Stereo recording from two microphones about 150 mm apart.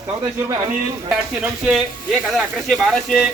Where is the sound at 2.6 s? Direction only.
Centre (ahead or behind).